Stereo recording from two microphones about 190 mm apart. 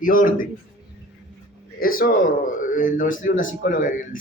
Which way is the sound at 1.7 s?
50° left (ahead or behind).